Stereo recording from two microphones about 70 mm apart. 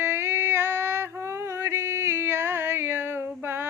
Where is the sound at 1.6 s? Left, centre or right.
Right.